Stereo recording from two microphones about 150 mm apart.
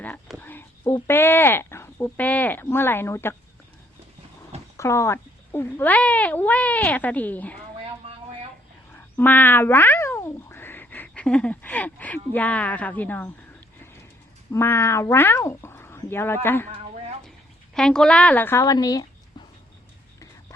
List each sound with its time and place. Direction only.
0.3 s a sound: 15° left (ahead or behind)
1.0 s speech: 15° left (ahead or behind)
4.8 s speech: 20° left (ahead or behind)
9.0 s speech: 15° left (ahead or behind)
14.5 s speech: 15° left (ahead or behind)
17.7 s speech: 5° left (ahead or behind)
18.6 s speech: 25° left (ahead or behind)